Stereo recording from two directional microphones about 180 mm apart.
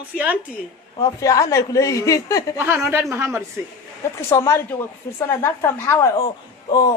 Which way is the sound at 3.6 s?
10° right (ahead or behind).